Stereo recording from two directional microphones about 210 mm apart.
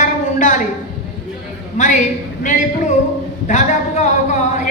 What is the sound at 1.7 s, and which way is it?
A man's voice, 35° left (ahead or behind).